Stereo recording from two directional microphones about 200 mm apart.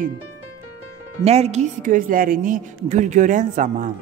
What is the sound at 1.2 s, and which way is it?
A woman's voice, 30° right (ahead or behind).